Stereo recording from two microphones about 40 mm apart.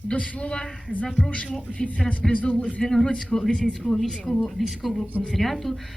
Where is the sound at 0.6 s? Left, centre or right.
Centre.